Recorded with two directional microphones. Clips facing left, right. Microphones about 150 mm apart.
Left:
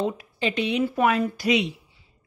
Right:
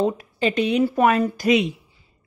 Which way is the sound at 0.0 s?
40° right (ahead or behind).